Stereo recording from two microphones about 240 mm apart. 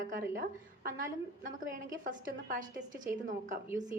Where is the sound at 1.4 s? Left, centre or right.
Right.